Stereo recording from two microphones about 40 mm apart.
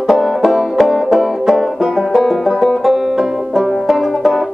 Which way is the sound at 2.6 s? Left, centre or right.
Centre.